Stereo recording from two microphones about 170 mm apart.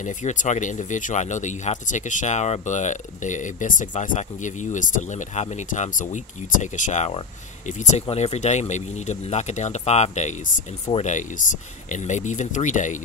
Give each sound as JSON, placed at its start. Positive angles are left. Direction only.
{"t": 0.0, "sound": "speech", "side_deg": 45}